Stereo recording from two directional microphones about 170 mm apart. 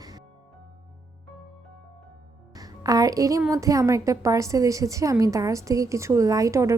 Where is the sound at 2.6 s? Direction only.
20° right (ahead or behind).